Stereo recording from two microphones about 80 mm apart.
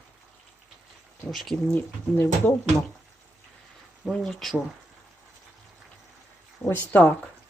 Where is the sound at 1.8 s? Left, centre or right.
Left.